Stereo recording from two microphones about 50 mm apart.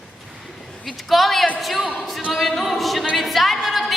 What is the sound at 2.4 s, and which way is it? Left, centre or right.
A capella, centre.